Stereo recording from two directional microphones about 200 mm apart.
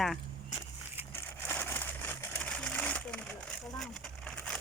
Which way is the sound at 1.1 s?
10° left (ahead or behind).